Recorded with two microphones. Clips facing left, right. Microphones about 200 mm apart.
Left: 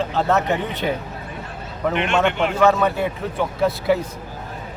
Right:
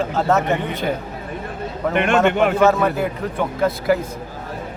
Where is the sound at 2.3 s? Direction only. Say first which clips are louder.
Right 5 dB; 50° right (ahead or behind).